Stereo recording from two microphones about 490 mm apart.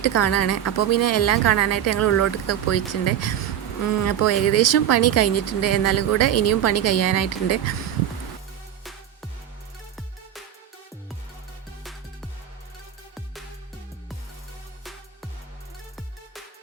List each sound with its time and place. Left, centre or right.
0.0 s a woman's voice: left
11.8 s music: centre